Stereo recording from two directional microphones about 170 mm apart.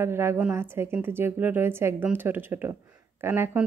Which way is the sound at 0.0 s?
15° right (ahead or behind).